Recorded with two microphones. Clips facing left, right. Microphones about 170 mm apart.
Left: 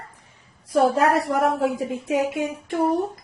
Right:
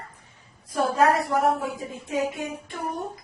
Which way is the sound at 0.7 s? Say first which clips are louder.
Left 3 dB; 80° left.